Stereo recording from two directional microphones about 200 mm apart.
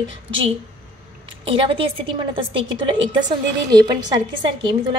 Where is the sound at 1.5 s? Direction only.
25° right (ahead or behind).